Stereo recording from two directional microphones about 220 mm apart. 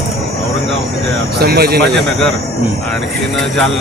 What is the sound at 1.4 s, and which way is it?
Speech, 45° right (ahead or behind).